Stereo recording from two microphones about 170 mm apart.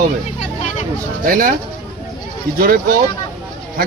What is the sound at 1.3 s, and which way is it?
Speech, 55° right (ahead or behind).